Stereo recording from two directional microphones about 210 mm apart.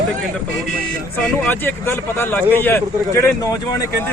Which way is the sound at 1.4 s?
10° left (ahead or behind).